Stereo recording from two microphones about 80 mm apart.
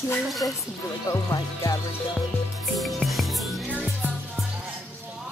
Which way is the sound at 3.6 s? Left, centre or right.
Centre.